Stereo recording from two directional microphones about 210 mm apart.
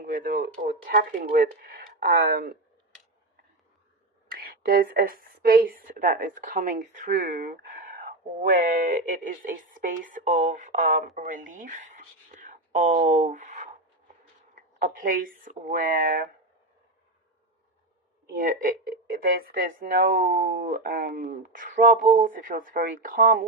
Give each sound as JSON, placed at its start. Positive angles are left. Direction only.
{"t": 0.0, "sound": "speech", "side_deg": -40}
{"t": 4.3, "sound": "speech", "side_deg": -45}
{"t": 14.8, "sound": "speech", "side_deg": -40}
{"t": 18.3, "sound": "speech", "side_deg": -40}